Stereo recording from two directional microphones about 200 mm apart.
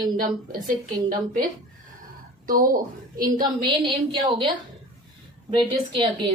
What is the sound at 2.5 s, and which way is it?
Speech, 45° right (ahead or behind).